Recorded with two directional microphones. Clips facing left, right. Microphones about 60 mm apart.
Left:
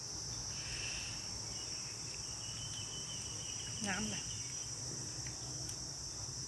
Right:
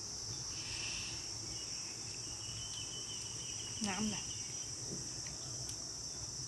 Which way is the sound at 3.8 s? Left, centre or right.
Centre.